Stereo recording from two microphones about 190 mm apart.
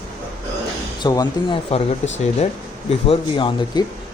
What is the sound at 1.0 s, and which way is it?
Speech, 20° left (ahead or behind).